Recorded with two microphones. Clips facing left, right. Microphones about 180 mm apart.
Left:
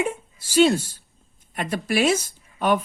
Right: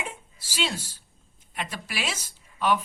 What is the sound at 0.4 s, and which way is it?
Speech, 50° left (ahead or behind).